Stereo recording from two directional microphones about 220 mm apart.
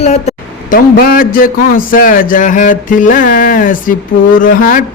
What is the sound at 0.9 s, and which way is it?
Speech, 40° left (ahead or behind).